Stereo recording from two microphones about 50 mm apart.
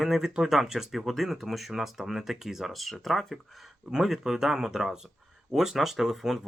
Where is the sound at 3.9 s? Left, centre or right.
Centre.